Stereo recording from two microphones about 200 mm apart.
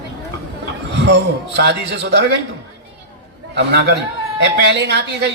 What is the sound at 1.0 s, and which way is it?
A man's voice, 55° right (ahead or behind).